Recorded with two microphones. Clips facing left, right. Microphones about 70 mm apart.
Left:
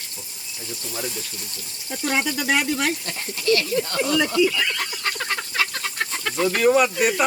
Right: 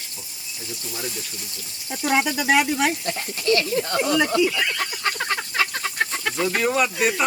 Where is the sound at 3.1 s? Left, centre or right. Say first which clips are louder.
Even; right.